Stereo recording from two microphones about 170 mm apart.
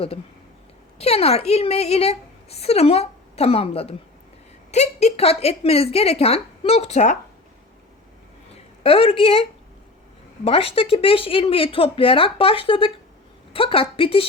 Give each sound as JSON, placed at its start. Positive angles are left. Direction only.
{"t": 0.9, "sound": "a woman's voice", "side_deg": 35}
{"t": 8.8, "sound": "a woman's voice", "side_deg": 35}